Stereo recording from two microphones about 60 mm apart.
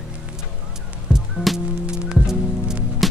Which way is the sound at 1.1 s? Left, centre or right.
Centre.